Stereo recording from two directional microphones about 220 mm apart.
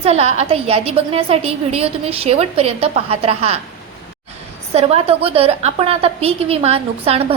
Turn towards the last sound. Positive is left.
turn(degrees=-25)  # may be behind; listen again after turning